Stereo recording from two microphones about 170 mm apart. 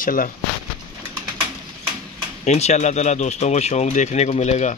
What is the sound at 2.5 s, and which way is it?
Speech, 40° left (ahead or behind).